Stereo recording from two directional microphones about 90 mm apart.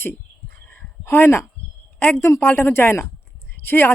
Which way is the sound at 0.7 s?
20° left (ahead or behind).